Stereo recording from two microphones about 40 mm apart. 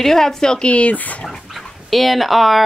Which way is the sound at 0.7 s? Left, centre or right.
Left.